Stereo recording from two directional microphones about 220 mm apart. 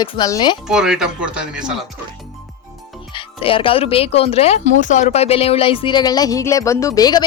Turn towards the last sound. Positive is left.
turn(degrees=15)  # may be behind; listen again after turning